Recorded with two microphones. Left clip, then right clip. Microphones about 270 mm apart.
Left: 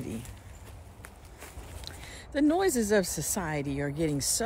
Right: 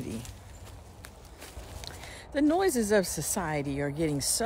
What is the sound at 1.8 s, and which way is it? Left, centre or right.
A woman's voice, centre.